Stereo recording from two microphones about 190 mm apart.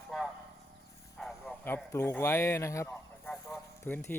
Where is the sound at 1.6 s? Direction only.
10° left (ahead or behind).